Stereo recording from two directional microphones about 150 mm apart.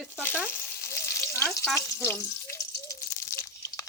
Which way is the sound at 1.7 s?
15° left (ahead or behind).